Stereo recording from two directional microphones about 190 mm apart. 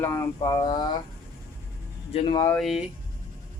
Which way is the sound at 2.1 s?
30° left (ahead or behind).